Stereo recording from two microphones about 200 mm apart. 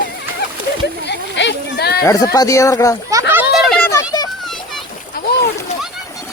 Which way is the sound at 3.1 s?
15° right (ahead or behind).